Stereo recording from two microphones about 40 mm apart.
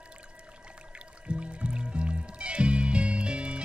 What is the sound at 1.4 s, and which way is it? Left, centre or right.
Music, right.